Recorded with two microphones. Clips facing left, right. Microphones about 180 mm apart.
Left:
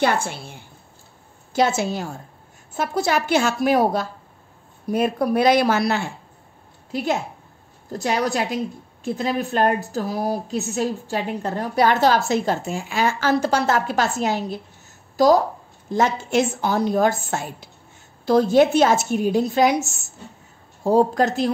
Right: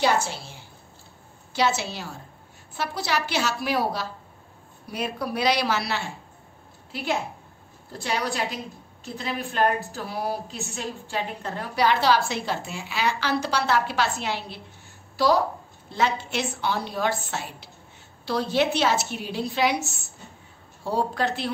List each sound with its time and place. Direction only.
0.0 s a woman's voice: 55° left (ahead or behind)